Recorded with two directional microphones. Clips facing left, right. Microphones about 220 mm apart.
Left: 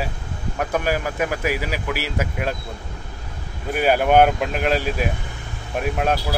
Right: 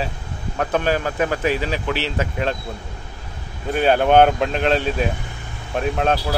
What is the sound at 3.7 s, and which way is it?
Speech, 10° left (ahead or behind).